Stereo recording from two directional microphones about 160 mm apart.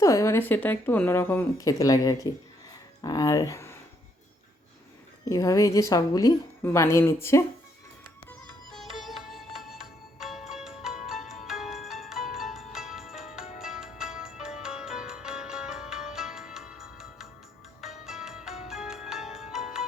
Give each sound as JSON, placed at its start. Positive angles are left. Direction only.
{"t": 0.0, "sound": "a woman's voice", "side_deg": 20}
{"t": 5.3, "sound": "a woman's voice", "side_deg": 20}
{"t": 8.3, "sound": "music", "side_deg": 0}